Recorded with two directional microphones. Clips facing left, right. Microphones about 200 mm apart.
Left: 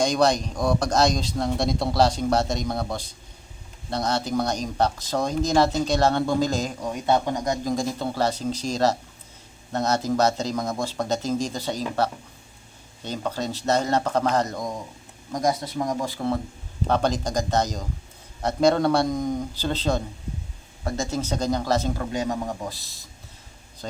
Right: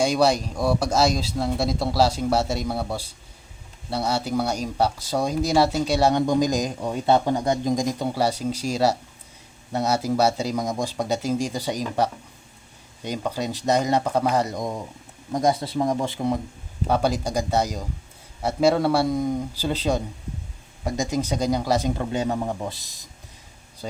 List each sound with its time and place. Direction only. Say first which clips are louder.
0.0 s a man's voice: right 1 dB; 10° right (ahead or behind)
6.8 s a man's voice: right 3 dB; 30° right (ahead or behind); by 14.6 s 10° right (ahead or behind)
15.3 s a man's voice: right 2 dB; 25° right (ahead or behind)
21.9 s speech: right 2 dB; 25° right (ahead or behind)
22.8 s a man's voice: even; 15° right (ahead or behind)